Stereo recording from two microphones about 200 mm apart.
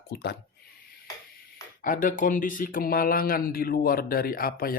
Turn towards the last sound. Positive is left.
turn(degrees=45)  # may be behind; listen again after turning